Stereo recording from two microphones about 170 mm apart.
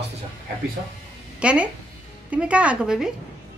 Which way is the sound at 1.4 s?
5° right (ahead or behind).